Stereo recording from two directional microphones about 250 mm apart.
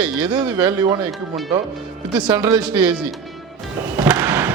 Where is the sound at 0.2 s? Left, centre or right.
Centre.